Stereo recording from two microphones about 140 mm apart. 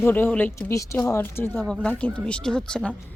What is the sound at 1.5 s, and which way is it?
Speech, 5° left (ahead or behind).